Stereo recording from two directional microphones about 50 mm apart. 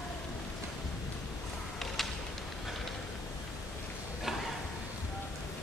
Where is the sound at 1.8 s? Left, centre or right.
Centre.